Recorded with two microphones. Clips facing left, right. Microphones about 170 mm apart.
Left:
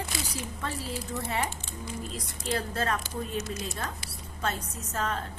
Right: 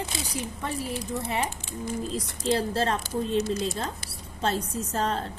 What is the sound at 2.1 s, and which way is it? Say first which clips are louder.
A woman's voice: right 6 dB; 30° right (ahead or behind).